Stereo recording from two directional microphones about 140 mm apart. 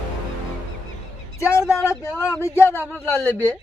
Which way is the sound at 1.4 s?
20° left (ahead or behind).